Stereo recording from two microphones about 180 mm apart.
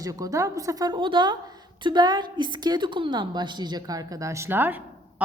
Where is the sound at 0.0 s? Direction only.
20° right (ahead or behind).